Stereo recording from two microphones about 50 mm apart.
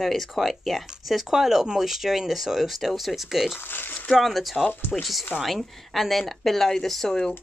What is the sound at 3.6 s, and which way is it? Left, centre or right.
Speech, left.